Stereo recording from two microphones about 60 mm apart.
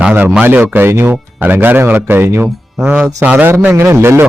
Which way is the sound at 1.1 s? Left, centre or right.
Right.